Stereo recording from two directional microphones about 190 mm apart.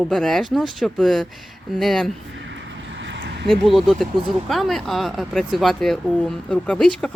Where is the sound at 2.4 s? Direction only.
75° right (ahead or behind).